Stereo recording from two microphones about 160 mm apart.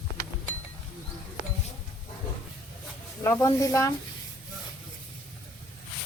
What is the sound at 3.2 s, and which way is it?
Speech, 20° left (ahead or behind).